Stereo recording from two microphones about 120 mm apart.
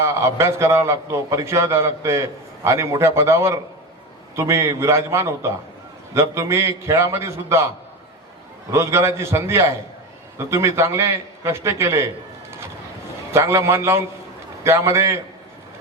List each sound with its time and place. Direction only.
0.0 s a man's voice: 25° right (ahead or behind)
8.7 s a man's voice: 25° right (ahead or behind)
13.3 s a man's voice: 20° right (ahead or behind)